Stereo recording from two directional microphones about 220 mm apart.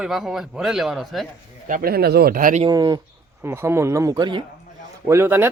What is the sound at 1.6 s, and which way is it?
Speech, 40° right (ahead or behind).